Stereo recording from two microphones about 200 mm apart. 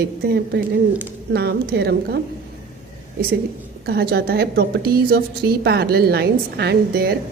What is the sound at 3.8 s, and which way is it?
A woman's voice, 50° right (ahead or behind).